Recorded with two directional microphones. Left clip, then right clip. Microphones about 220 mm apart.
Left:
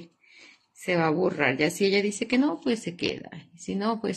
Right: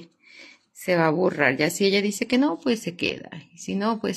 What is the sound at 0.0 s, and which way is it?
A woman's voice, 20° right (ahead or behind).